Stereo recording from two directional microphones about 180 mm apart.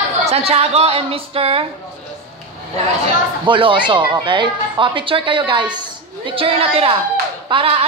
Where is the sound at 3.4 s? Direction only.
30° right (ahead or behind).